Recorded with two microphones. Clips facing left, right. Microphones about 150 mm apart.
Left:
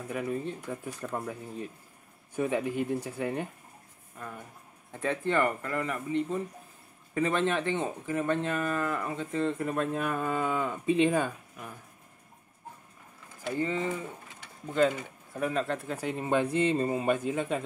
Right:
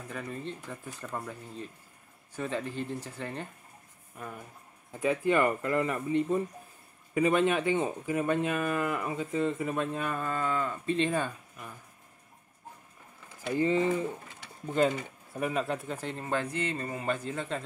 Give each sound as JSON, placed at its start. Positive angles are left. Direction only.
{"t": 0.1, "sound": "speech", "side_deg": 10}
{"t": 4.9, "sound": "speech", "side_deg": -5}
{"t": 7.2, "sound": "speech", "side_deg": -10}
{"t": 13.6, "sound": "speech", "side_deg": -20}
{"t": 15.0, "sound": "speech", "side_deg": -10}